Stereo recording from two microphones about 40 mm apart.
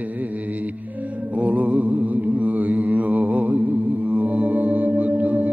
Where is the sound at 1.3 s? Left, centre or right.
Right.